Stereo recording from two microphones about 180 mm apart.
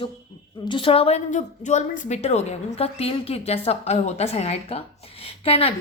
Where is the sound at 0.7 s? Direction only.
30° left (ahead or behind).